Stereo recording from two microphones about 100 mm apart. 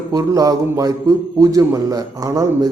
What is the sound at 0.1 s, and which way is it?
A man's voice, 35° right (ahead or behind).